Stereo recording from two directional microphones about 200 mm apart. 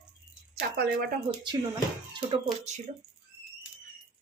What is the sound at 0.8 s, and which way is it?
Speech, 50° right (ahead or behind).